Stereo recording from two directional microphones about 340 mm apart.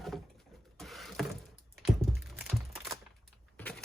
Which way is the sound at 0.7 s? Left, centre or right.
Centre.